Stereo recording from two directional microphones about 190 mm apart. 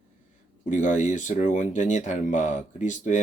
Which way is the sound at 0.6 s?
40° left (ahead or behind).